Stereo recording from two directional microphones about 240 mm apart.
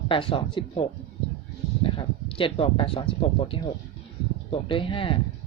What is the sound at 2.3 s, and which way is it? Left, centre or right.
Speech, left.